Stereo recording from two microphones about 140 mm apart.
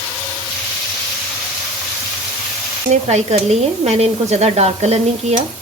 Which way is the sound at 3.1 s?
50° right (ahead or behind).